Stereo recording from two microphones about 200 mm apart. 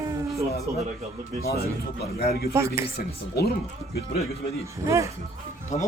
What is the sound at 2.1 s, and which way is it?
Speech, 50° left (ahead or behind).